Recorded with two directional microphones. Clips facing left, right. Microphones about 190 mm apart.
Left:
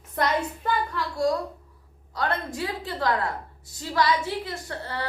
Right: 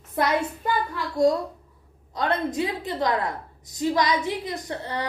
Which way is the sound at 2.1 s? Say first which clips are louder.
Right 4 dB; 20° right (ahead or behind).